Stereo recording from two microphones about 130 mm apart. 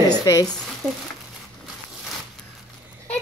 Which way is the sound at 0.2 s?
25° left (ahead or behind).